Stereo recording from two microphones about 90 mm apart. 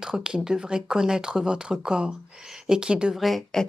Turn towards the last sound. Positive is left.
turn(degrees=5)  # may be behind; listen again after turning